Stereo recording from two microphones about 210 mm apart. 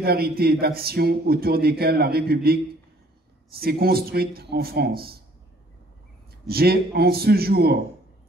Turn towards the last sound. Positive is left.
turn(degrees=-50)  # may be behind; listen again after turning